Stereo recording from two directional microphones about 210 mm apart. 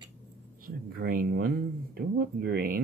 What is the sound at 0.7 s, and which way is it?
Speech, 45° right (ahead or behind).